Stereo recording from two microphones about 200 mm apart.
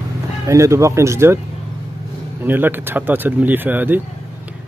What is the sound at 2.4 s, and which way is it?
Speech, 10° right (ahead or behind).